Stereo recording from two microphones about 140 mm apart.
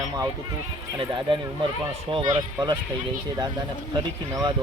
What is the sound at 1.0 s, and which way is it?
Speech, 35° right (ahead or behind).